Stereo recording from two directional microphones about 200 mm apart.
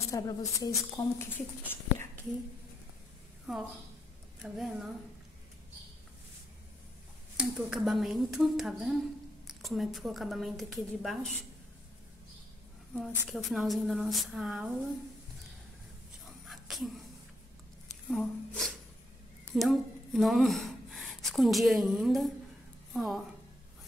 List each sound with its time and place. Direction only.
0.1 s speech: 15° left (ahead or behind)
3.5 s a woman's voice: centre (ahead or behind)
7.3 s a woman's voice: 5° right (ahead or behind)
12.9 s a woman's voice: centre (ahead or behind)
16.4 s dog: centre (ahead or behind)
18.1 s a woman's voice: 5° left (ahead or behind)